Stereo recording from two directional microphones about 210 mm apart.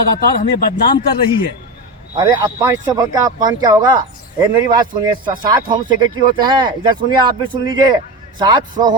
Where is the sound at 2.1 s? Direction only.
20° right (ahead or behind).